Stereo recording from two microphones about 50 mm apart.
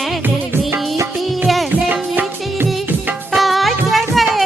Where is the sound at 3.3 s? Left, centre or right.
Centre.